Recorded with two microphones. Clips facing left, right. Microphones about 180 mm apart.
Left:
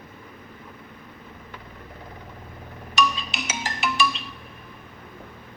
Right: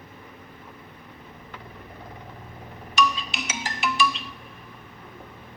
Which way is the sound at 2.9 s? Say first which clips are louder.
Even; 60° left (ahead or behind).